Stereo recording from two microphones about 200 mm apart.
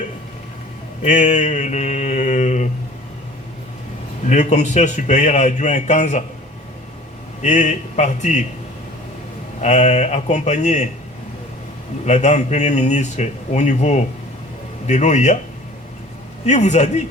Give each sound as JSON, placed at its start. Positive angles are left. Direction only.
{"t": 1.0, "sound": "a man's voice", "side_deg": 35}
{"t": 4.3, "sound": "a man's voice", "side_deg": 35}
{"t": 7.4, "sound": "a man's voice", "side_deg": 35}
{"t": 9.6, "sound": "a man's voice", "side_deg": 35}
{"t": 12.0, "sound": "a man's voice", "side_deg": 35}
{"t": 16.5, "sound": "a man's voice", "side_deg": 35}